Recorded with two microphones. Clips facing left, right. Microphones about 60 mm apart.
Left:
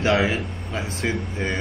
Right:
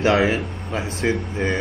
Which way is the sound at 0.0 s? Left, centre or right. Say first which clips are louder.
Right 3 dB; right.